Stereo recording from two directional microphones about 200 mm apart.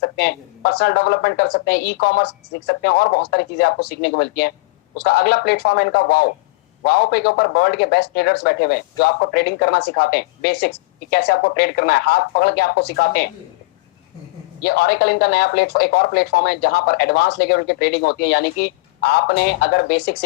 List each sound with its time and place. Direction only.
0.0 s speech: 55° left (ahead or behind)
14.6 s speech: 55° left (ahead or behind)